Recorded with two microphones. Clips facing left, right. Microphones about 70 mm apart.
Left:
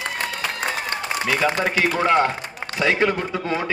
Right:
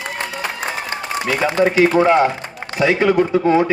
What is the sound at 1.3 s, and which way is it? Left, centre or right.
Speech, right.